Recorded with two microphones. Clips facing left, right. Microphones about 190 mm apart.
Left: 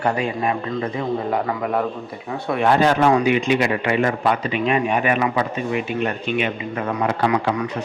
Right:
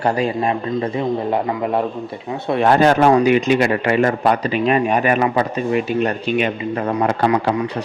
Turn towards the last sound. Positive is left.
turn(degrees=-35)  # may be behind; listen again after turning